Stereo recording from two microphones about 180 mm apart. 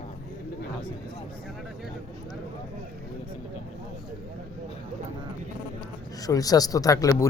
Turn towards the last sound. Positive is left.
turn(degrees=20)  # may be behind; listen again after turning